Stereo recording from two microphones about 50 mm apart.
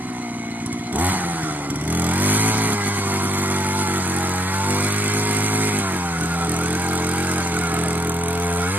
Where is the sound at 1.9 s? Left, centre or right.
Right.